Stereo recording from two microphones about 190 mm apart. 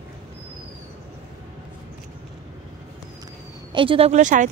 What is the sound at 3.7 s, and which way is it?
Speech, 30° right (ahead or behind).